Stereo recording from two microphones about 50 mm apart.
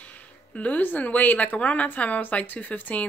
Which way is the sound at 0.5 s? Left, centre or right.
Left.